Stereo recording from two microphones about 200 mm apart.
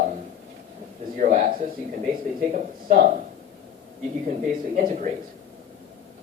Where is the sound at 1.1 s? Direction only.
40° right (ahead or behind).